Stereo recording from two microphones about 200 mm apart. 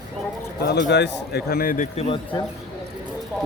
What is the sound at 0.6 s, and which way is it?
A man's voice, 60° left (ahead or behind).